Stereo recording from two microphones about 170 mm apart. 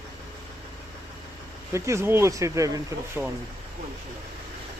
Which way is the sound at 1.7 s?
15° right (ahead or behind).